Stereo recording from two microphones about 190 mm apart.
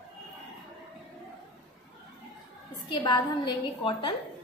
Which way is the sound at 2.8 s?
25° left (ahead or behind).